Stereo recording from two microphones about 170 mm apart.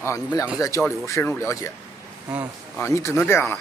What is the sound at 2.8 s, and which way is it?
Speech, 15° left (ahead or behind).